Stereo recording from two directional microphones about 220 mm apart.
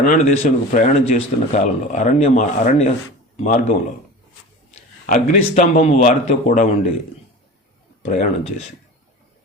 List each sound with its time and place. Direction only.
0.0 s a man's voice: 35° left (ahead or behind)
8.0 s speech: 30° left (ahead or behind)